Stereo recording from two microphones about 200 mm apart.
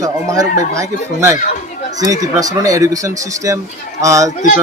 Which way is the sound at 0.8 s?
15° right (ahead or behind).